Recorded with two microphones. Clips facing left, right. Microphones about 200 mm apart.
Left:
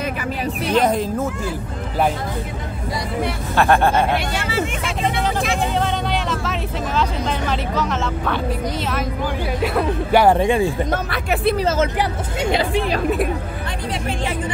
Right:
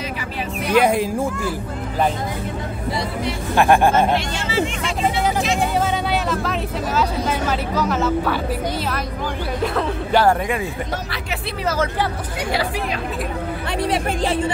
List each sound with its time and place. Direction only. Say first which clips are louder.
0.7 s speech: right 2 dB; 10° right (ahead or behind)
3.5 s speech: right 1 dB; 15° right (ahead or behind)
4.4 s speech: right 1 dB; 55° left (ahead or behind)
5.6 s speech: right 1 dB; 5° right (ahead or behind)
9.6 s music: left 2 dB; 10° left (ahead or behind)
10.3 s speech: left 6 dB; 30° left (ahead or behind)
10.9 s speech: left 6 dB; 55° left (ahead or behind)
11.6 s speech: left 2 dB; 25° left (ahead or behind)